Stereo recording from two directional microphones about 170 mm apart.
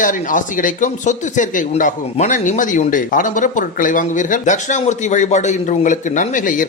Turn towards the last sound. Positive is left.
turn(degrees=50)  # may be behind; listen again after turning